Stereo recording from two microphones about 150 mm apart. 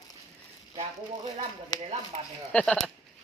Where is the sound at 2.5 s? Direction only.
5° left (ahead or behind).